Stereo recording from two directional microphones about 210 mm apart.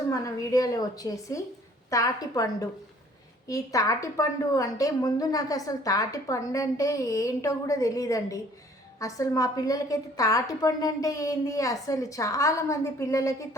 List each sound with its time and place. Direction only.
0.1 s a woman's voice: 15° left (ahead or behind)